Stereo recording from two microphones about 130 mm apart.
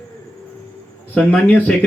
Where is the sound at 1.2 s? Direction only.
10° left (ahead or behind).